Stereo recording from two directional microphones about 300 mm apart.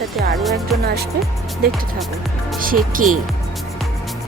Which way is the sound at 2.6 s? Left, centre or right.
Right.